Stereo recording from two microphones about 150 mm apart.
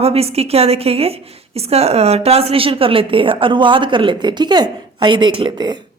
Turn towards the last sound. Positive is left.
turn(degrees=-30)  # may be behind; listen again after turning